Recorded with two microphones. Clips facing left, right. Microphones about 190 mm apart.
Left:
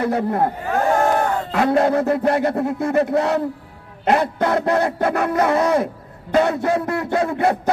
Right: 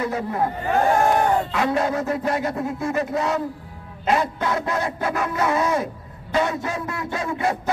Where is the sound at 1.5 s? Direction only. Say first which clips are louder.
Left 5 dB; 55° left (ahead or behind).